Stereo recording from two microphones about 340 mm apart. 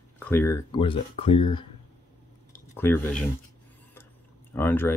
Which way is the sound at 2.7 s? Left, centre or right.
Centre.